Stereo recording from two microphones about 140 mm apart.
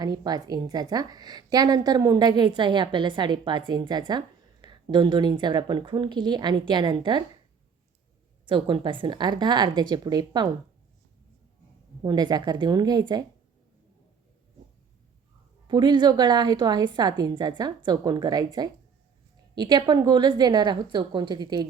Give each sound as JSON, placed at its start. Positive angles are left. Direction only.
{"t": 0.0, "sound": "a woman's voice", "side_deg": -30}
{"t": 8.4, "sound": "a woman's voice", "side_deg": -35}
{"t": 12.0, "sound": "a woman's voice", "side_deg": -30}
{"t": 15.6, "sound": "a woman's voice", "side_deg": -30}